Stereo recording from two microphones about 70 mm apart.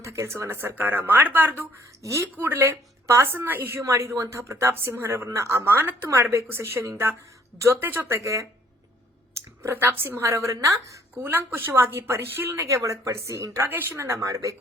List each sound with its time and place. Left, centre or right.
0.0 s a woman's voice: right
2.0 s a woman's voice: right
2.3 s a woman's voice: right
3.8 s a woman's voice: right
8.2 s speech: right
9.6 s a woman's voice: right
11.1 s a woman's voice: right